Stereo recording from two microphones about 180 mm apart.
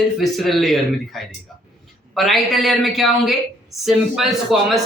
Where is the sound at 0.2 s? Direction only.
Centre (ahead or behind).